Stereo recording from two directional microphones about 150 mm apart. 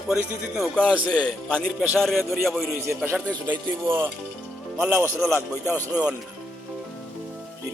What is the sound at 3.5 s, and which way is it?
Speech, 15° right (ahead or behind).